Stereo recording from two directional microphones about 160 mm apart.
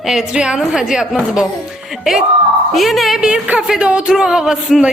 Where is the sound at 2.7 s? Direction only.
Centre (ahead or behind).